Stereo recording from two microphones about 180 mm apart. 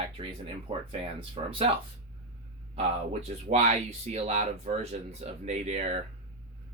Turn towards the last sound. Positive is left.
turn(degrees=-40)  # may be behind; listen again after turning